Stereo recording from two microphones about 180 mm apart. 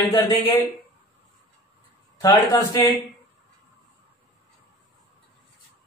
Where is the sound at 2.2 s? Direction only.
20° left (ahead or behind).